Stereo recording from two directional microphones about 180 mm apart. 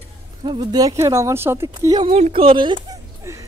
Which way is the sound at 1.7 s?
25° right (ahead or behind).